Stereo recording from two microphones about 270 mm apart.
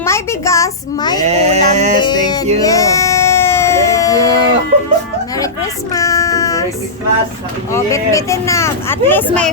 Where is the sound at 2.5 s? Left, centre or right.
Centre.